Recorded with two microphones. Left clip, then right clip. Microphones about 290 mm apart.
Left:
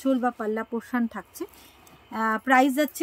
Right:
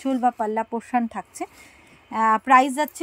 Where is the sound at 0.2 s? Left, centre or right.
Centre.